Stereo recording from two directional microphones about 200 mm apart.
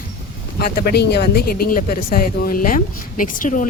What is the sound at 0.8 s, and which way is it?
Speech, 55° left (ahead or behind).